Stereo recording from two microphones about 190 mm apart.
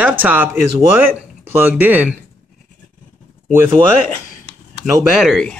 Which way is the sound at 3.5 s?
10° right (ahead or behind).